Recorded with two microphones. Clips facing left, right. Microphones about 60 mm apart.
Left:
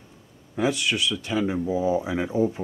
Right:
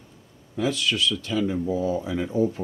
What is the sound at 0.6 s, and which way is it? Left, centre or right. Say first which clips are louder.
Speech: left 1 dB; left.